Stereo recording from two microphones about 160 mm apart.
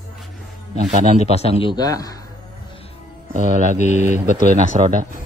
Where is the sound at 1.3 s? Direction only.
40° left (ahead or behind).